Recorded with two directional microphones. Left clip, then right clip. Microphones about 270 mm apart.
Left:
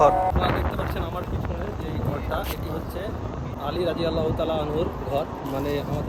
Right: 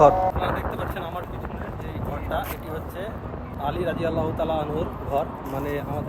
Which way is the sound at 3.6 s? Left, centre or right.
Centre.